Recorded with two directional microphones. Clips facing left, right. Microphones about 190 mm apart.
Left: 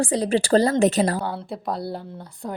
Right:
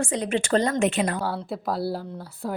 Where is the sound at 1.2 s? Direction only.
Centre (ahead or behind).